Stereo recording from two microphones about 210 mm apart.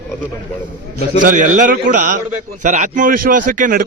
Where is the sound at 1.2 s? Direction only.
40° right (ahead or behind).